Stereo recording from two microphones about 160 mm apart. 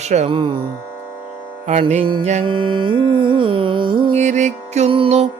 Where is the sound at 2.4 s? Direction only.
30° right (ahead or behind).